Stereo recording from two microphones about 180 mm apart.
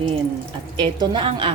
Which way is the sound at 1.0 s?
25° right (ahead or behind).